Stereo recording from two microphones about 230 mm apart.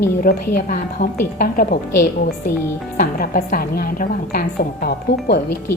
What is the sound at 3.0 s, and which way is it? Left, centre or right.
A woman's voice, left.